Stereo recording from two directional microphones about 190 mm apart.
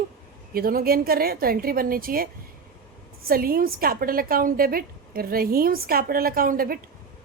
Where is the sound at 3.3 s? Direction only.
50° right (ahead or behind).